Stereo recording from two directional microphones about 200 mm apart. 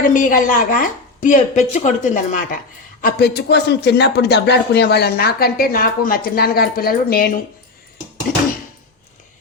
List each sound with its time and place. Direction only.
0.0 s speech: 40° left (ahead or behind)
3.0 s speech: 50° left (ahead or behind)